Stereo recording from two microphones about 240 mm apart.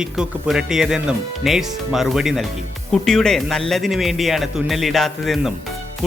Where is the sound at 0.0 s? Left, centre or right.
Centre.